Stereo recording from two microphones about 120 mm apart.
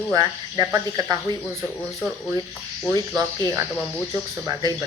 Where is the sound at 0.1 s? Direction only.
35° right (ahead or behind).